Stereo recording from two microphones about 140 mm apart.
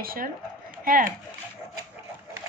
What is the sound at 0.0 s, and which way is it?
A woman's voice, 90° right.